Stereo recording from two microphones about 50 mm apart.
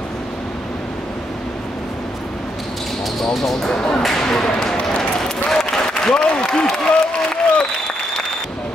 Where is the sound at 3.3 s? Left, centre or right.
Centre.